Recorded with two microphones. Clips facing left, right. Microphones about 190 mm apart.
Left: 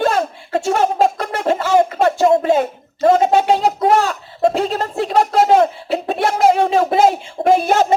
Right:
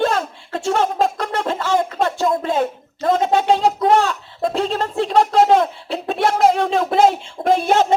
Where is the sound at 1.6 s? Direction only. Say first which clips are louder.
Left 5 dB; 10° left (ahead or behind).